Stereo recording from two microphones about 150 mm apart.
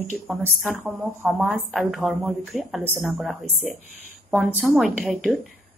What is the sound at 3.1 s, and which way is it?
Speech, centre (ahead or behind).